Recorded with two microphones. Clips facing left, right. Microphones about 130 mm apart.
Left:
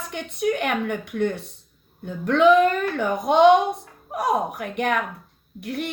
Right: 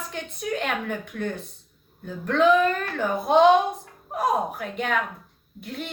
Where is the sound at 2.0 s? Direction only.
75° left (ahead or behind).